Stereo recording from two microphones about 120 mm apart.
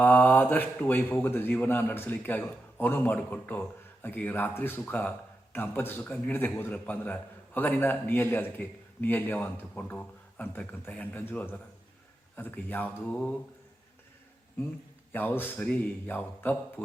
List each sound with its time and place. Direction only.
0.0 s a man's voice: 15° left (ahead or behind)
15.1 s a man's voice: 15° left (ahead or behind)